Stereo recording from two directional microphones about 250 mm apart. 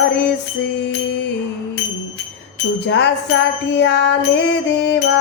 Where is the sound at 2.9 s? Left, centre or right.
Left.